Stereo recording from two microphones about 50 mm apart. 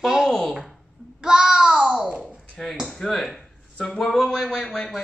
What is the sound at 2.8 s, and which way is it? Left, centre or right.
Speech, centre.